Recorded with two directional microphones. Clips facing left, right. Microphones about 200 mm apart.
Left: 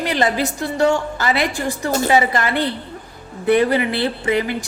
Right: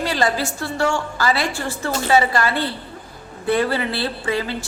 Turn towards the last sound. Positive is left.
turn(degrees=15)  # may be behind; listen again after turning